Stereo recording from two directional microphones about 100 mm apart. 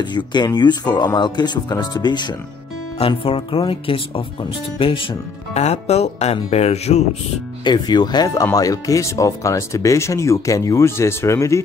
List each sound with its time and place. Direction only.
0.1 s speech: 45° left (ahead or behind)
3.0 s speech: 65° left (ahead or behind)
5.5 s speech: 90° left
7.6 s speech: 45° left (ahead or behind); by 11.6 s 30° left (ahead or behind)